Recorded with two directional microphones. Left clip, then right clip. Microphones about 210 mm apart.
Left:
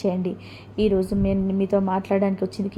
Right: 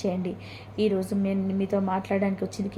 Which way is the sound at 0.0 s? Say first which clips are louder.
Left 4 dB; 20° left (ahead or behind).